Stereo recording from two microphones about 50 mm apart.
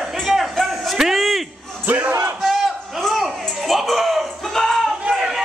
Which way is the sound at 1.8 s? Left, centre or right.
Right.